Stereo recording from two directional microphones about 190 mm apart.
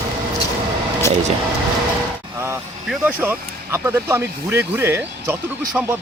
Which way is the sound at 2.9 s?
10° right (ahead or behind).